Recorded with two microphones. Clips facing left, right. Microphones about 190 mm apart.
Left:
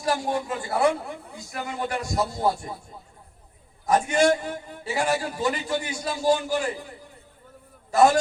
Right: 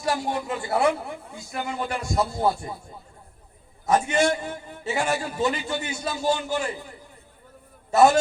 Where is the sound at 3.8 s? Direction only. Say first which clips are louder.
Left 1 dB; 25° right (ahead or behind).